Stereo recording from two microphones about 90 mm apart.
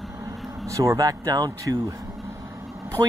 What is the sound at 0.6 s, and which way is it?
Speech, 35° right (ahead or behind).